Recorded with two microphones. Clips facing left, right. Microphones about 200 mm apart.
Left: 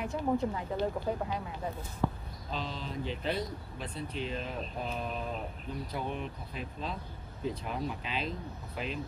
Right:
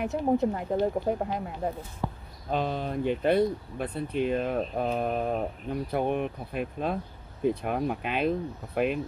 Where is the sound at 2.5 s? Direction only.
55° right (ahead or behind).